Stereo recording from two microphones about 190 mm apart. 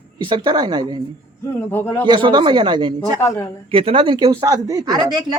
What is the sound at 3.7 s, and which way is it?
A man's voice, 30° right (ahead or behind).